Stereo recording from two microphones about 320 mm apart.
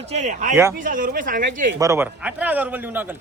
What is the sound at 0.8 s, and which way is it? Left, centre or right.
Speech, right.